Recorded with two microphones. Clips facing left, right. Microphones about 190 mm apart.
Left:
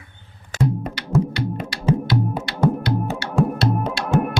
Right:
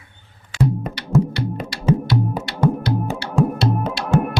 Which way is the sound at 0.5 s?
45° left (ahead or behind).